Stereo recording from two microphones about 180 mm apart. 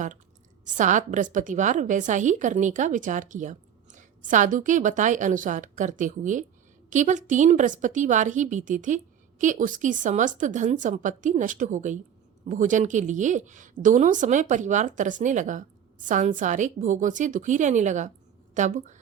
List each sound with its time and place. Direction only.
0.6 s a woman's voice: 45° right (ahead or behind)